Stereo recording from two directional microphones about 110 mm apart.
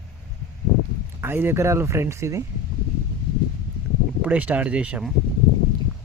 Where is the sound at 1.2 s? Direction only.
20° right (ahead or behind).